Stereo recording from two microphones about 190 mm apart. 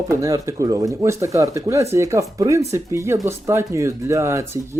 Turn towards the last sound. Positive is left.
turn(degrees=-15)  # may be behind; listen again after turning